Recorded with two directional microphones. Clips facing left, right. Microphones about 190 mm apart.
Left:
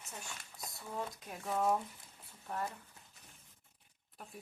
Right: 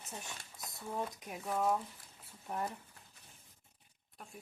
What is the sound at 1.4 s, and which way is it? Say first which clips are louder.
Speech: even; centre (ahead or behind).